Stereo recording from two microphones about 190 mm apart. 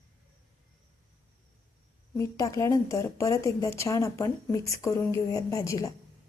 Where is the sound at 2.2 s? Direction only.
15° left (ahead or behind).